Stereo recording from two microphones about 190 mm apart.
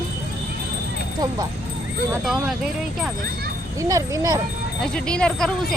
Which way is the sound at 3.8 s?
15° right (ahead or behind).